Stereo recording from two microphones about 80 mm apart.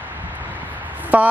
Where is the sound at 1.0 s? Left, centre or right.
Right.